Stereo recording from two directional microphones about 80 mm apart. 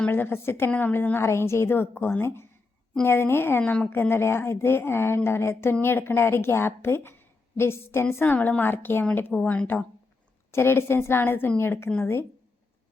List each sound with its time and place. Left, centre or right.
0.1 s a woman's voice: left
3.6 s speech: centre
3.8 s a woman's voice: left